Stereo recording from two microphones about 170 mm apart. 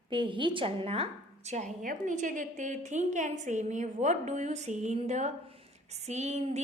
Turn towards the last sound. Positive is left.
turn(degrees=-40)  # may be behind; listen again after turning